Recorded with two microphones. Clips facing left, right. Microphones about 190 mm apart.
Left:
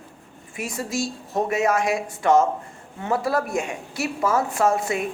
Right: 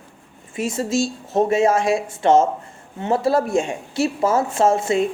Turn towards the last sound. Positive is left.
turn(degrees=-25)  # may be behind; listen again after turning